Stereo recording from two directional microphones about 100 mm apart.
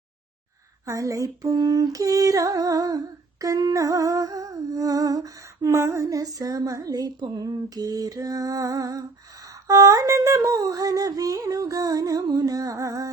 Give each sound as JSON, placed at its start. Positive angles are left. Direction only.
{"t": 0.9, "sound": "humming", "side_deg": -35}